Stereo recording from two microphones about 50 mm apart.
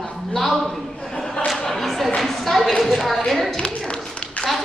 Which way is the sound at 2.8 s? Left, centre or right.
Centre.